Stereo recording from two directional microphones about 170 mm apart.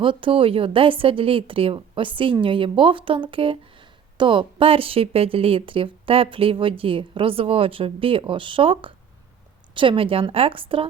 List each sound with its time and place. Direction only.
0.0 s a woman's voice: 30° right (ahead or behind)